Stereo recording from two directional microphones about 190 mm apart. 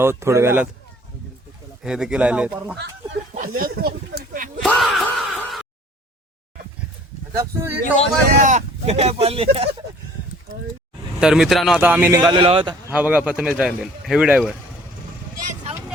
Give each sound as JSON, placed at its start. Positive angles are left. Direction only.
{"t": 0.0, "sound": "speech", "side_deg": -15}
{"t": 1.8, "sound": "speech", "side_deg": -5}
{"t": 3.3, "sound": "a sound", "side_deg": -45}
{"t": 4.6, "sound": "groan", "side_deg": 0}
{"t": 7.3, "sound": "speech", "side_deg": -15}
{"t": 8.4, "sound": "speech", "side_deg": -40}
{"t": 11.2, "sound": "speech", "side_deg": -5}
{"t": 12.9, "sound": "speech", "side_deg": -5}